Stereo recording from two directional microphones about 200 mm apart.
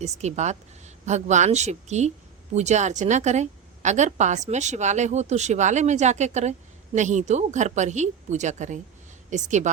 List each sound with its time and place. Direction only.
0.0 s a woman's voice: 35° right (ahead or behind)